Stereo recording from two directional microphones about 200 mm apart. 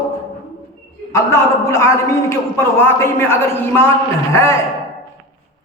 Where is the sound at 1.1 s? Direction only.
15° left (ahead or behind).